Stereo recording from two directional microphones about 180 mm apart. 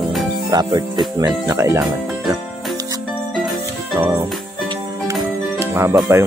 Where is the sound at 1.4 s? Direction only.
15° right (ahead or behind).